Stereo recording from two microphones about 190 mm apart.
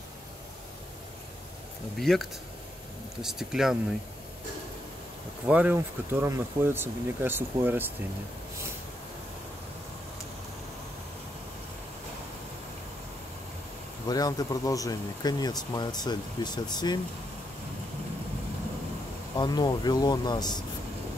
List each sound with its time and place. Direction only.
2.0 s speech: centre (ahead or behind)
5.5 s speech: 10° right (ahead or behind)
14.0 s speech: 20° left (ahead or behind)
19.3 s speech: 20° left (ahead or behind)